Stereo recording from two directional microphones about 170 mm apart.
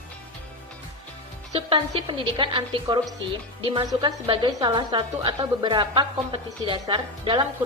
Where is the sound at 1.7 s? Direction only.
30° right (ahead or behind).